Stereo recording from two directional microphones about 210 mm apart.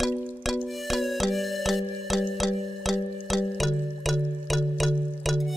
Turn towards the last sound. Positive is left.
turn(degrees=0)  # may be behind; listen again after turning